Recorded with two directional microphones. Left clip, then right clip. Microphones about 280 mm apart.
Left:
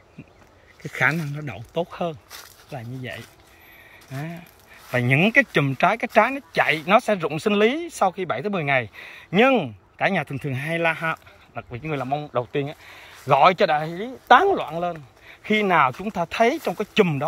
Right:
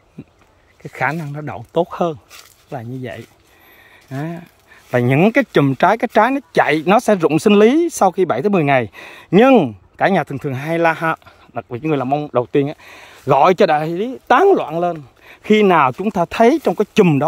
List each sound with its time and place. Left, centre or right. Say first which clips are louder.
0.8 s speech: right 2 dB; centre; by 17.2 s right